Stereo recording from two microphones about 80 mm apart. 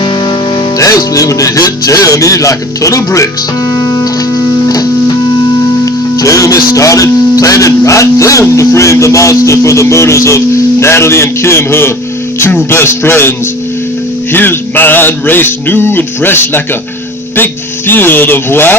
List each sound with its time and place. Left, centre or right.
0.8 s speech: left
3.8 s music: left
5.8 s speech: left
14.3 s mantra: left